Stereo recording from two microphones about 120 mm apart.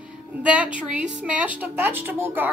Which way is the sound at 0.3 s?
10° right (ahead or behind).